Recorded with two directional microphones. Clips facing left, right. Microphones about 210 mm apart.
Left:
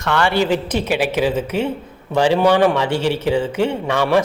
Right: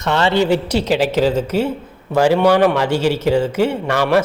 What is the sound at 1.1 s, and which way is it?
Speech, 10° left (ahead or behind).